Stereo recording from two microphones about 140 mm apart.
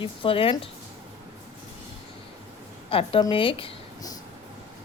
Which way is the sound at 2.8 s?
40° left (ahead or behind).